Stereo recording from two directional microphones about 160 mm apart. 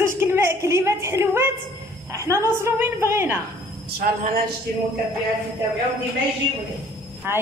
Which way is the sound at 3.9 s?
70° right (ahead or behind).